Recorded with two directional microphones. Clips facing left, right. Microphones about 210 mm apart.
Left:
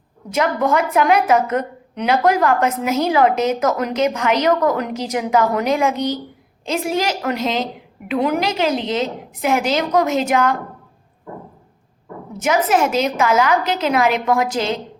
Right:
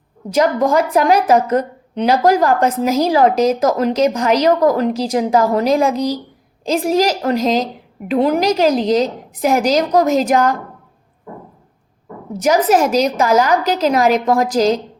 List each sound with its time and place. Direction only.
0.3 s a woman's voice: 35° right (ahead or behind)
12.4 s a woman's voice: 35° right (ahead or behind)